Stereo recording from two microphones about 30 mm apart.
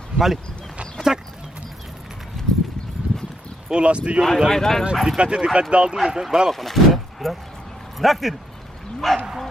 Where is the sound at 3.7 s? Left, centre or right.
Right.